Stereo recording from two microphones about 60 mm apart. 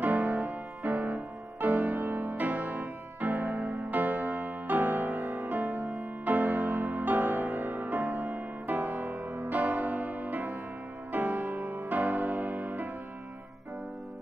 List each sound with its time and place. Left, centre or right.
0.0 s music: right
8.7 s music: right